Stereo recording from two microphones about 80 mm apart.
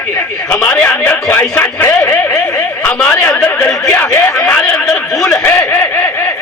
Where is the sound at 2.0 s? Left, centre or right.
Left.